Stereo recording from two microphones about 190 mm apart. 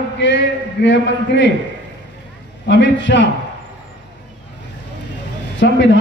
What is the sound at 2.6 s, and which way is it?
Speech, 70° left (ahead or behind).